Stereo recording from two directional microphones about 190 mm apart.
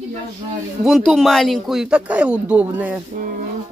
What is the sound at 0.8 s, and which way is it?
Speech, centre (ahead or behind).